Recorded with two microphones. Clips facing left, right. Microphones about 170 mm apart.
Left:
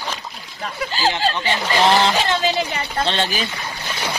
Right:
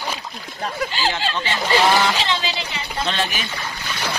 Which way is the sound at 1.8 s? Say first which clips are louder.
Left 3 dB; 20° left (ahead or behind).